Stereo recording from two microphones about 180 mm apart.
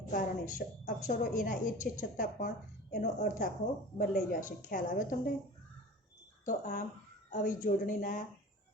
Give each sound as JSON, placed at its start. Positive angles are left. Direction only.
{"t": 0.1, "sound": "a woman's voice", "side_deg": 45}
{"t": 6.4, "sound": "a woman's voice", "side_deg": 45}